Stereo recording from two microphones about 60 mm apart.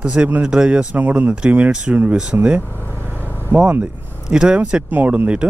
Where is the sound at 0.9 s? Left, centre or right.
Right.